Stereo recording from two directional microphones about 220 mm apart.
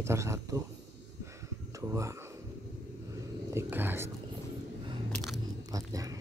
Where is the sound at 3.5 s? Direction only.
10° right (ahead or behind).